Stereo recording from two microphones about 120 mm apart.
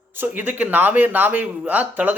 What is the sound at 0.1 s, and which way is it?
Speech, 15° right (ahead or behind).